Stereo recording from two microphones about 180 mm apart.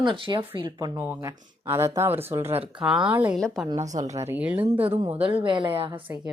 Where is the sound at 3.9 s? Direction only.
40° right (ahead or behind).